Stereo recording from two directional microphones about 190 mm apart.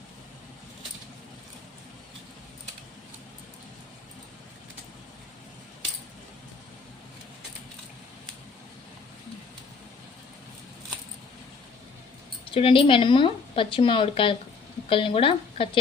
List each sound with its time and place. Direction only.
12.5 s a woman's voice: 25° left (ahead or behind)